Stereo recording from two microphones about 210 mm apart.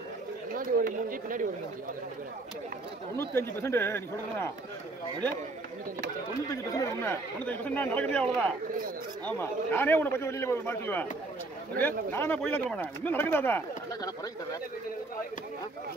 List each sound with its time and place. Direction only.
0.6 s speech: 40° right (ahead or behind)
3.2 s speech: 10° left (ahead or behind)
6.5 s speech: 15° left (ahead or behind)
12.1 s speech: 10° left (ahead or behind)